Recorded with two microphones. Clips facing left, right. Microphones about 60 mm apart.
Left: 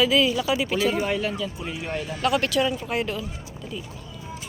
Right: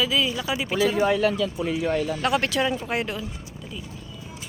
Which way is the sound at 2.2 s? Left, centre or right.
Right.